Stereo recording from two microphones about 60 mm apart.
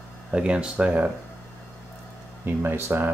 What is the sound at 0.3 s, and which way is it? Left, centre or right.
Speech, centre.